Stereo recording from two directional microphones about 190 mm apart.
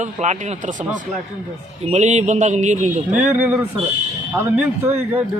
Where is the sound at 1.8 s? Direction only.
40° right (ahead or behind).